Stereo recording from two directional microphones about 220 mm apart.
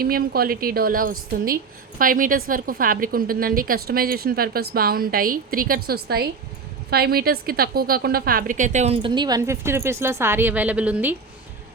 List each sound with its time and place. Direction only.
0.0 s a woman's voice: 45° right (ahead or behind); by 11.1 s 5° right (ahead or behind)